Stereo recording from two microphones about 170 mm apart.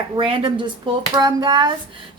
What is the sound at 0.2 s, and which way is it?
A woman's voice, 30° right (ahead or behind).